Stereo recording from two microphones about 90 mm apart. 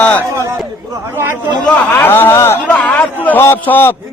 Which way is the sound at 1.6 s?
15° left (ahead or behind).